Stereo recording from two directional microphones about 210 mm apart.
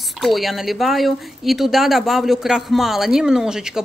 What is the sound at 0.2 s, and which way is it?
Speech, centre (ahead or behind).